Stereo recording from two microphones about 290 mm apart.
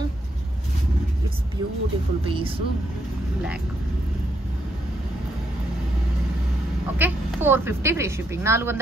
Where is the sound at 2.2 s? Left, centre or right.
Centre.